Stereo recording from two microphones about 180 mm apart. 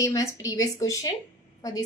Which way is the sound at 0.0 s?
20° left (ahead or behind).